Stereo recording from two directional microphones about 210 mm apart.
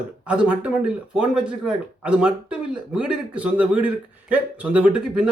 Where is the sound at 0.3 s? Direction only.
5° right (ahead or behind).